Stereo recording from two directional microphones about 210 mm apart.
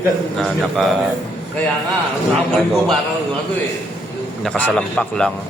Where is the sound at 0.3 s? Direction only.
Centre (ahead or behind).